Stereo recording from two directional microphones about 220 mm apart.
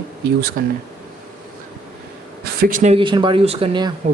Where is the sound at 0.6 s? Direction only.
40° right (ahead or behind).